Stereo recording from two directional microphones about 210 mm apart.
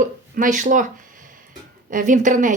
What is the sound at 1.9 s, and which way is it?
Speech, 35° right (ahead or behind).